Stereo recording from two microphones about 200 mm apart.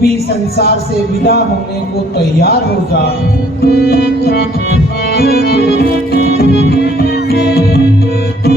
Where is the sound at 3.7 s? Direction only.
55° left (ahead or behind).